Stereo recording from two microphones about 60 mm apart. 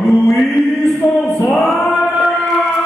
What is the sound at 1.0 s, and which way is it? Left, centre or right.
Music, left.